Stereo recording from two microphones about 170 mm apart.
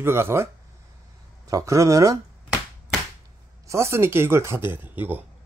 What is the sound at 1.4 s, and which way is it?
Speech, 20° right (ahead or behind).